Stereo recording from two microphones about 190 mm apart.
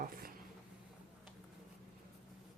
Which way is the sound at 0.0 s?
50° right (ahead or behind).